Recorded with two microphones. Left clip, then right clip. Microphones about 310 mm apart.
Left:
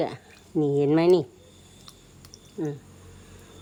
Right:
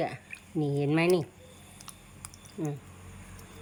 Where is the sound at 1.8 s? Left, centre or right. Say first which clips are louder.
Left 1 dB; centre.